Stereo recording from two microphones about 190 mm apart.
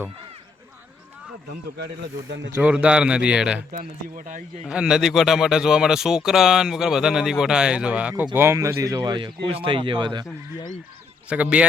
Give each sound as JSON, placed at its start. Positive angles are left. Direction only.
{"t": 2.5, "sound": "speech", "side_deg": -10}
{"t": 3.7, "sound": "speech", "side_deg": -45}
{"t": 4.6, "sound": "speech", "side_deg": -5}
{"t": 11.3, "sound": "speech", "side_deg": -5}